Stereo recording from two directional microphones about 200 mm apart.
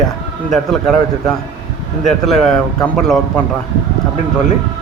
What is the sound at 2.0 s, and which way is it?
A man's voice, centre (ahead or behind).